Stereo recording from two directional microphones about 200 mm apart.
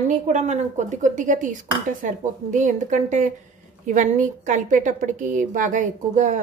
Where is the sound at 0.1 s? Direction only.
35° right (ahead or behind).